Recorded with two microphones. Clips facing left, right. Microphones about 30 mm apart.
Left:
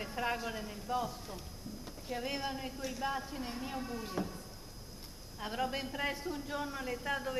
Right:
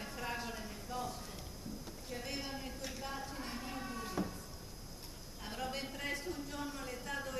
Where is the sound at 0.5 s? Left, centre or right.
Centre.